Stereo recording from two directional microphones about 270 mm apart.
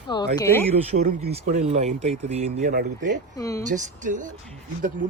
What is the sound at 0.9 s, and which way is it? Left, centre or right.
Speech, right.